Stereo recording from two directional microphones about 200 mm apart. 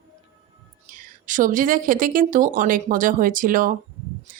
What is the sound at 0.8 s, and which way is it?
A woman's voice, 40° right (ahead or behind).